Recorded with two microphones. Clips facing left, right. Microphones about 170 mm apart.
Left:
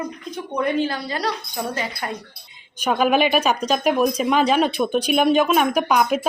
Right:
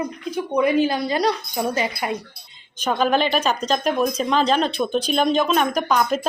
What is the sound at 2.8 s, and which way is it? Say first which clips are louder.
A woman's voice: left 2 dB; 10° left (ahead or behind).